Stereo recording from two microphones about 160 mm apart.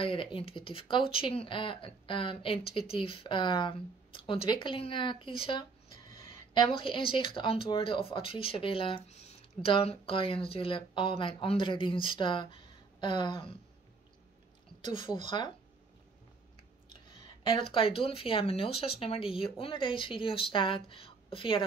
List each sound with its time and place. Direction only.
0.0 s speech: 30° left (ahead or behind)
14.8 s a woman's voice: 30° left (ahead or behind)
17.4 s speech: 35° left (ahead or behind)